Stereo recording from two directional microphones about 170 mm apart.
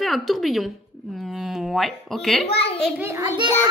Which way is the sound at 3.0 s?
15° right (ahead or behind).